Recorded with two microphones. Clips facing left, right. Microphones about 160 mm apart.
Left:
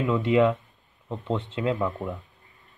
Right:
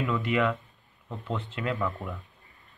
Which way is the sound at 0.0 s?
25° left (ahead or behind).